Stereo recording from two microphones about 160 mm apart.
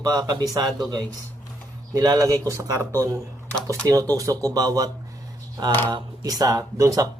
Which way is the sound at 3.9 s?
20° right (ahead or behind).